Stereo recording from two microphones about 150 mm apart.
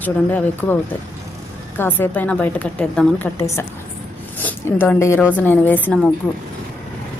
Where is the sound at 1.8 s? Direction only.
15° left (ahead or behind).